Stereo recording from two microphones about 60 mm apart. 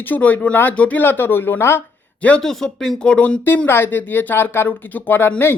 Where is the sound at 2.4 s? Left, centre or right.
Centre.